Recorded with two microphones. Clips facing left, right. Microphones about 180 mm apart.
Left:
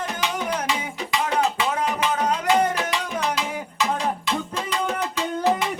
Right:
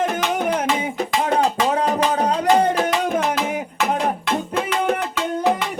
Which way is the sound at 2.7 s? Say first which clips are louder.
Right 7 dB; 50° right (ahead or behind).